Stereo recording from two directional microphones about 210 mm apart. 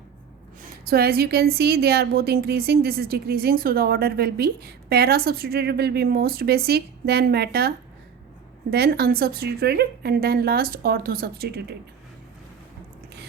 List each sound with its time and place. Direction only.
0.9 s a woman's voice: 45° right (ahead or behind)
8.7 s a woman's voice: 45° right (ahead or behind)